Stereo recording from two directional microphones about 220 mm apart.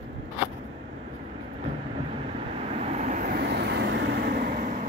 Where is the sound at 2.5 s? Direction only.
30° right (ahead or behind).